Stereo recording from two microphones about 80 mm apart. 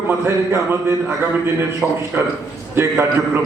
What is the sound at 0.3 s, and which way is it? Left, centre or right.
Speech, right.